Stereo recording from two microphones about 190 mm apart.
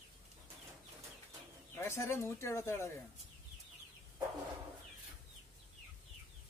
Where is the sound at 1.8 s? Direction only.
15° left (ahead or behind).